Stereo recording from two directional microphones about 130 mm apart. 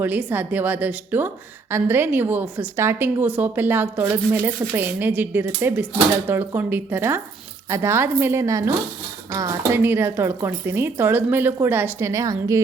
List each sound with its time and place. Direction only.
0.0 s speech: 15° right (ahead or behind)